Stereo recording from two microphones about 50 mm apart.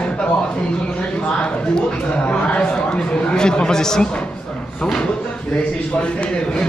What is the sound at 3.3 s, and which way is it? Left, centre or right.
Speech, centre.